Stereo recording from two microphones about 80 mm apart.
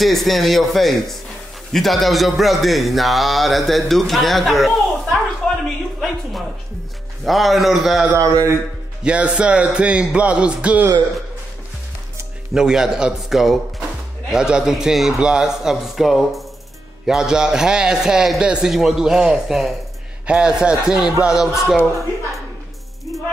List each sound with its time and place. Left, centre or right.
0.0 s speech: centre
7.2 s speech: centre
8.2 s speech: right
9.0 s a man's voice: centre
12.5 s a man's voice: centre